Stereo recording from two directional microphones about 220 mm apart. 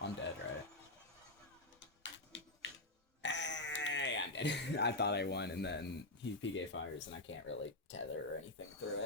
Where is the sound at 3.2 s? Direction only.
55° left (ahead or behind).